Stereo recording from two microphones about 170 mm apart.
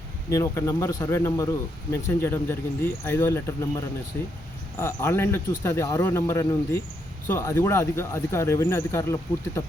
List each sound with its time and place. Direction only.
0.3 s speech: 20° left (ahead or behind)